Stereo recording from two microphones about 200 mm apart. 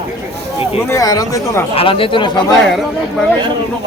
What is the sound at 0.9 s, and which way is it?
Speech, 15° left (ahead or behind).